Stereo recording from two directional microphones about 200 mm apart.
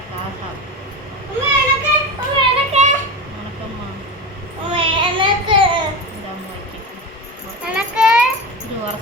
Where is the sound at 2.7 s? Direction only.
35° right (ahead or behind).